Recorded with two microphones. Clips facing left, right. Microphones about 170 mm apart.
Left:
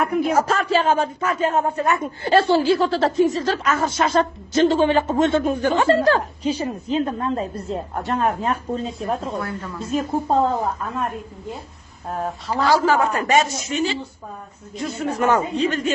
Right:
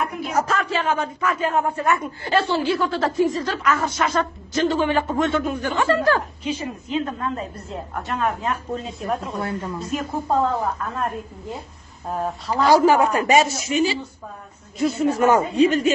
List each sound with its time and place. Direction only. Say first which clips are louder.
0.0 s speech: left 7 dB; 55° left (ahead or behind)
0.4 s speech: left 3 dB; 30° left (ahead or behind)
9.4 s a woman's voice: right 2 dB; 25° right (ahead or behind)
9.8 s speech: left 3 dB; 30° left (ahead or behind)
12.1 s speech: right 1 dB; centre (ahead or behind)
12.6 s a man's voice: right 3 dB; 15° right (ahead or behind)
15.1 s a man's voice: right 1 dB; 10° right (ahead or behind)